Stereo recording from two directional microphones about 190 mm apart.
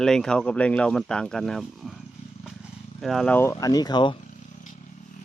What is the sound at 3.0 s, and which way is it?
Speech, centre (ahead or behind).